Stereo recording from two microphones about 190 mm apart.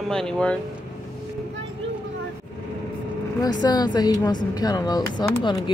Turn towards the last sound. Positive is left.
turn(degrees=25)  # may be behind; listen again after turning